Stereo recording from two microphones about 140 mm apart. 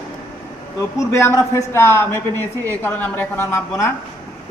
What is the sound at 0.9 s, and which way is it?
A man's voice, 20° left (ahead or behind).